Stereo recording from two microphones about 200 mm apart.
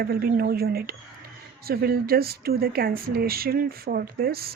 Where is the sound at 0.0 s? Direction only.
50° right (ahead or behind).